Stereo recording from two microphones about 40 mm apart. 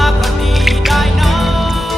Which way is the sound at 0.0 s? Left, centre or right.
Centre.